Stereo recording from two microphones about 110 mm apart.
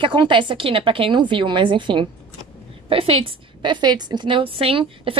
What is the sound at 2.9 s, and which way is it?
Speech, 55° right (ahead or behind).